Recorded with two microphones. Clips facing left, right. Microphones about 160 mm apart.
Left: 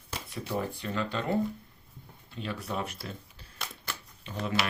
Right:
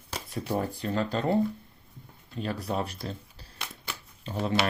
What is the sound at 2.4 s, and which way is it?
Speech, 40° right (ahead or behind).